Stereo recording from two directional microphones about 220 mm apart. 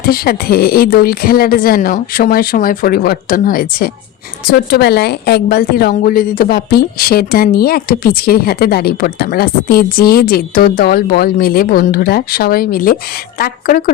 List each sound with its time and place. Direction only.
0.1 s a woman's voice: 45° left (ahead or behind)